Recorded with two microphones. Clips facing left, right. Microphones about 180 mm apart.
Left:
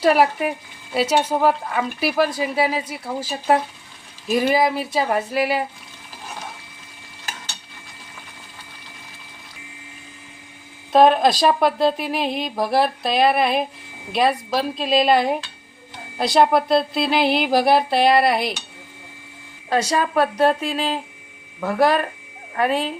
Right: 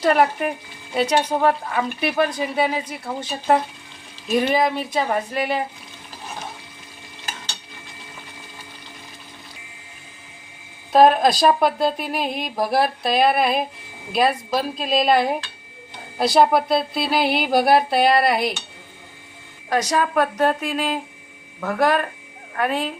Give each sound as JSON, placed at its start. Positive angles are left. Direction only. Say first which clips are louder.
{"t": 0.0, "sound": "a woman's voice", "louder": "left 1 dB", "side_deg": 5}
{"t": 10.9, "sound": "a woman's voice", "louder": "even", "side_deg": 0}
{"t": 19.8, "sound": "a woman's voice", "louder": "even", "side_deg": 10}
{"t": 20.6, "sound": "speech", "louder": "even", "side_deg": 35}
{"t": 21.6, "sound": "a woman's voice", "louder": "left 2 dB", "side_deg": 10}